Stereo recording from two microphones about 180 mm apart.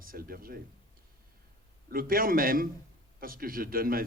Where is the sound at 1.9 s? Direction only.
55° right (ahead or behind).